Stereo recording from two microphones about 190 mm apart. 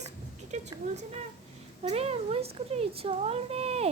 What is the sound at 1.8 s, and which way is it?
Speech, 30° right (ahead or behind).